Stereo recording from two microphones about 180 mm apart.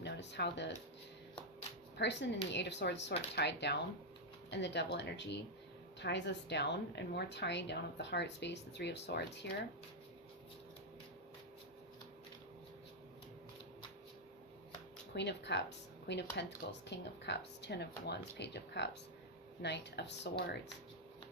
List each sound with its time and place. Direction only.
0.0 s speech: 75° left (ahead or behind)
2.0 s a woman's voice: 75° left (ahead or behind)
15.1 s a woman's voice: 70° left (ahead or behind)